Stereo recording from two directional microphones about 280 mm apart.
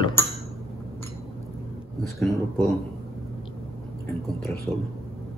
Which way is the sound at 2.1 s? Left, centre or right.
Centre.